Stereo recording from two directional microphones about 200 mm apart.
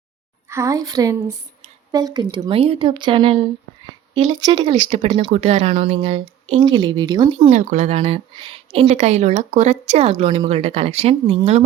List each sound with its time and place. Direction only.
0.5 s speech: 15° right (ahead or behind)